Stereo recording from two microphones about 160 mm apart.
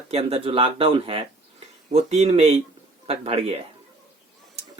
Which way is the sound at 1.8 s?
45° right (ahead or behind).